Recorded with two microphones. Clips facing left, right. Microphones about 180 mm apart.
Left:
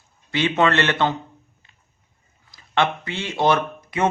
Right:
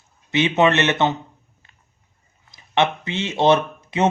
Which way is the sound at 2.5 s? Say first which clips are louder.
Right 2 dB; 20° right (ahead or behind).